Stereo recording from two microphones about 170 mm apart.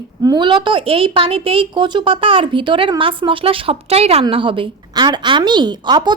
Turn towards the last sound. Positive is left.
turn(degrees=-25)  # may be behind; listen again after turning